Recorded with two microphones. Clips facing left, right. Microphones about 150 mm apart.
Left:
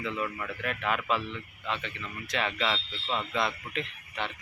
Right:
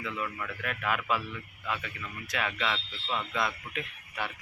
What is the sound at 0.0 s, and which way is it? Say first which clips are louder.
Speech: left 3 dB; 30° left (ahead or behind).